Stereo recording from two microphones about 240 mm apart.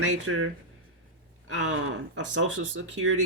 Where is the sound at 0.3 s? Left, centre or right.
Right.